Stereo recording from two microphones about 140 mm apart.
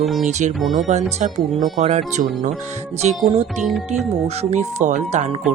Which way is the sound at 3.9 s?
50° right (ahead or behind).